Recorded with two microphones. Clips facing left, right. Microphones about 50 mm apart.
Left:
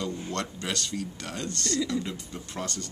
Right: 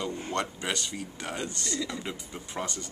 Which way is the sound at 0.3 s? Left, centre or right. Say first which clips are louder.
Right 1 dB; centre.